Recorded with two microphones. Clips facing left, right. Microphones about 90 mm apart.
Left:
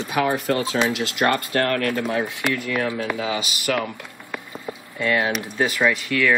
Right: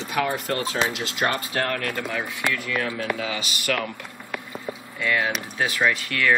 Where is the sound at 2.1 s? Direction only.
35° left (ahead or behind).